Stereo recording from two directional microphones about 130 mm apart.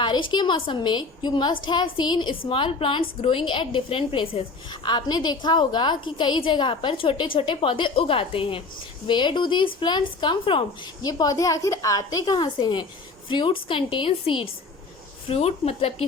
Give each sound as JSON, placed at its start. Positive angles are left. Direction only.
{"t": 0.0, "sound": "a woman's voice", "side_deg": 40}
{"t": 11.0, "sound": "a woman's voice", "side_deg": 30}